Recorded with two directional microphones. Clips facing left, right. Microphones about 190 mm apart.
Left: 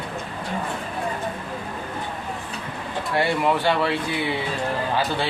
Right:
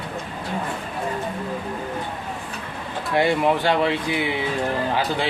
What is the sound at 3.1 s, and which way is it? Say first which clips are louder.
Speech: right 2 dB; 15° right (ahead or behind).